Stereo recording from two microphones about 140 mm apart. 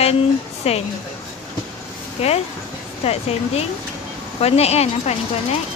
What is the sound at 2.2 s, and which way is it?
A woman's voice, 45° left (ahead or behind).